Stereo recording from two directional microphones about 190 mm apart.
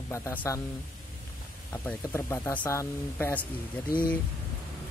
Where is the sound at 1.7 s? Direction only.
15° left (ahead or behind).